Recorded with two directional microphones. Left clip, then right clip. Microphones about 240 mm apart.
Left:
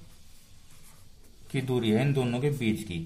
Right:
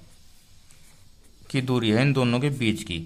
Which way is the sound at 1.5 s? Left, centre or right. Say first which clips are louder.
Right 4 dB; right.